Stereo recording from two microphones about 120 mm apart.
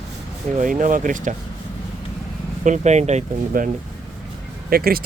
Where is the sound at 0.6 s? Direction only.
90° right.